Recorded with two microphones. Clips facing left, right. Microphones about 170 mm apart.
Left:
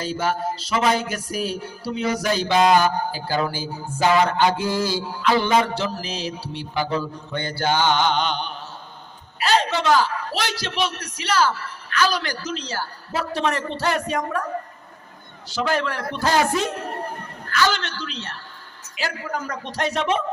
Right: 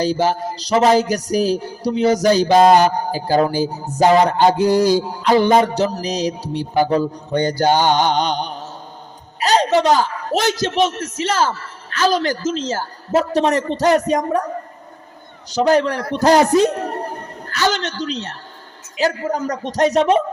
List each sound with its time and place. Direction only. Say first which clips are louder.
0.0 s music: right 6 dB; 40° right (ahead or behind)
9.4 s speech: right 6 dB; 40° right (ahead or behind)
11.3 s speech: right 1 dB; 25° right (ahead or behind)
12.1 s speech: right 8 dB; 45° right (ahead or behind)
12.5 s music: right 7 dB; 45° right (ahead or behind)
15.4 s music: right 8 dB; 40° right (ahead or behind)